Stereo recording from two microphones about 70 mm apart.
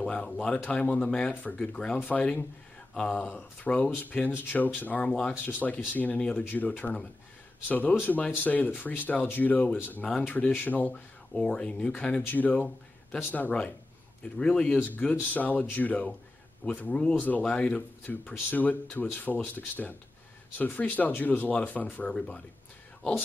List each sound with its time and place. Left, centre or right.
0.0 s speech: centre
3.3 s speech: left
5.0 s speech: centre
5.4 s speech: left
11.4 s speech: centre
14.4 s speech: centre
14.8 s speech: left
22.1 s speech: centre